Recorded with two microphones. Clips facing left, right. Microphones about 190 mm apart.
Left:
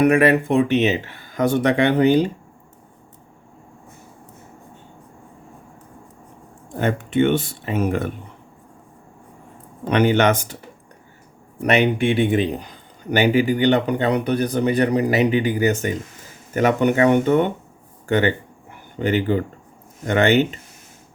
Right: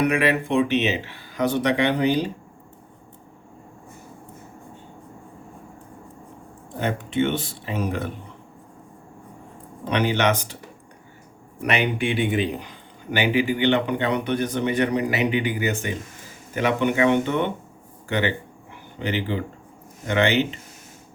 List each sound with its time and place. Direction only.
0.0 s speech: 45° left (ahead or behind)
6.7 s speech: 55° left (ahead or behind)
9.9 s speech: 55° left (ahead or behind)
11.6 s a man's voice: 40° left (ahead or behind)
18.1 s a sound: 45° left (ahead or behind)
20.1 s speech: 45° left (ahead or behind)